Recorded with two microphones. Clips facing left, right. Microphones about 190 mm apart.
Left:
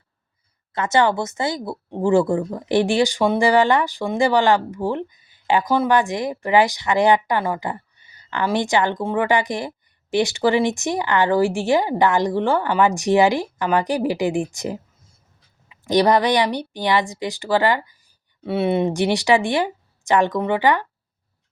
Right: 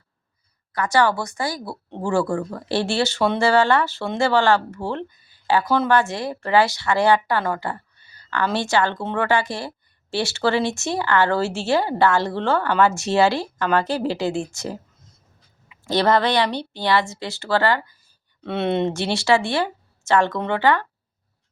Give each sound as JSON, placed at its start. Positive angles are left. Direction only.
{"t": 0.7, "sound": "a woman's voice", "side_deg": 20}
{"t": 14.5, "sound": "a sound", "side_deg": 15}
{"t": 15.8, "sound": "a woman's voice", "side_deg": 15}